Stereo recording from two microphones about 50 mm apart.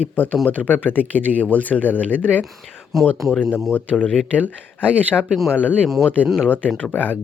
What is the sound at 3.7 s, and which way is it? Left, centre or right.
Speech, left.